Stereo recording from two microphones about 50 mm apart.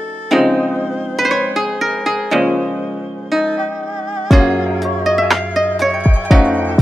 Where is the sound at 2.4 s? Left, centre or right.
Right.